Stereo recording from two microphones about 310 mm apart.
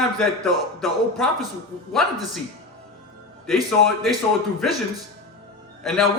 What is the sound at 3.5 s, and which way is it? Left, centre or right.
Speech, centre.